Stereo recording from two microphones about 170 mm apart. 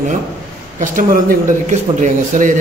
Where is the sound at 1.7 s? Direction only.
45° right (ahead or behind).